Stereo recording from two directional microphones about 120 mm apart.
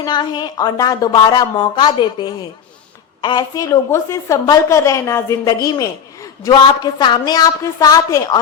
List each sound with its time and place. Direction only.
0.0 s a woman's voice: 40° left (ahead or behind)